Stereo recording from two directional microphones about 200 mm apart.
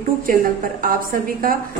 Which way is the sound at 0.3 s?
45° right (ahead or behind).